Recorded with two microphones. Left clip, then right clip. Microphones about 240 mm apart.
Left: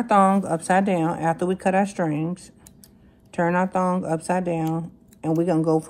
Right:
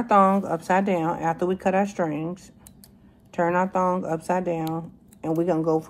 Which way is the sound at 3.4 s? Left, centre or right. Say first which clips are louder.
Even; left.